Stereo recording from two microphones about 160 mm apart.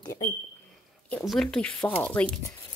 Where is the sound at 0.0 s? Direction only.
25° left (ahead or behind).